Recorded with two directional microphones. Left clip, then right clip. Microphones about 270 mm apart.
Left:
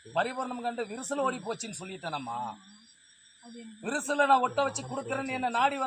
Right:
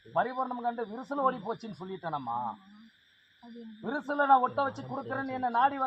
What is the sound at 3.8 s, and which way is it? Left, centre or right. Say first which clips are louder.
A man's voice: left 2 dB; centre.